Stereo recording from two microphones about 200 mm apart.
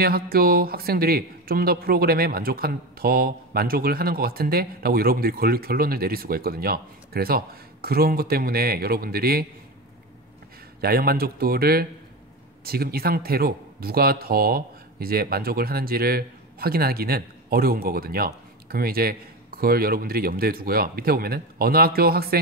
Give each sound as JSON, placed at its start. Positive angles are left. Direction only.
{"t": 0.0, "sound": "speech", "side_deg": -50}
{"t": 10.8, "sound": "speech", "side_deg": -50}